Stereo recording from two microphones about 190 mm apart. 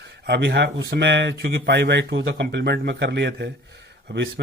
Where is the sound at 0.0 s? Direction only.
60° right (ahead or behind).